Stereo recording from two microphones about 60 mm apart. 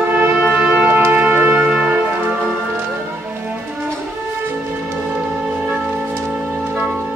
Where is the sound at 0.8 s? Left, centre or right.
Right.